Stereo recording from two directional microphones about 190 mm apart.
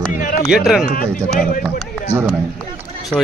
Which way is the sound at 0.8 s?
45° left (ahead or behind).